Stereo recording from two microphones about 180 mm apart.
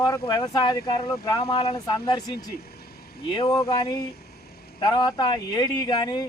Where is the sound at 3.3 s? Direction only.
25° left (ahead or behind).